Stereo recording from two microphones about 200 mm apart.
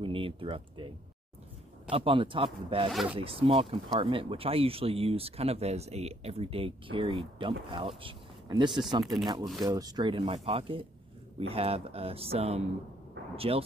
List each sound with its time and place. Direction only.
0.0 s speech: 25° right (ahead or behind)
1.9 s speech: 25° right (ahead or behind)
2.9 s speech: centre (ahead or behind)
3.2 s speech: 25° right (ahead or behind)